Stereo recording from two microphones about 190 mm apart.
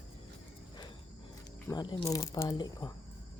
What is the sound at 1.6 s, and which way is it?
Speech, 25° left (ahead or behind).